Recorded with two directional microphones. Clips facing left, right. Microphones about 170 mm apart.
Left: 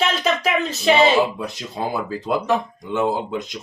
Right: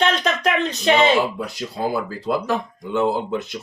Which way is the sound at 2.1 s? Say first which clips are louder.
Left 1 dB; 20° left (ahead or behind).